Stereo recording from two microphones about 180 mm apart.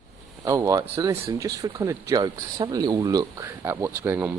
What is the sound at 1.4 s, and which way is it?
Speech, 20° right (ahead or behind).